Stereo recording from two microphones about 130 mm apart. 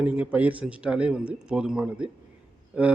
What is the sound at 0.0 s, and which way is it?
Mantra, 10° right (ahead or behind).